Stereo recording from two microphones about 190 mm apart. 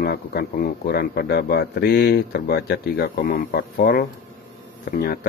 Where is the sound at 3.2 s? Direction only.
50° left (ahead or behind).